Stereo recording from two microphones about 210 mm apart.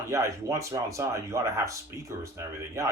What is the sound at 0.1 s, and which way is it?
Speech, 15° right (ahead or behind).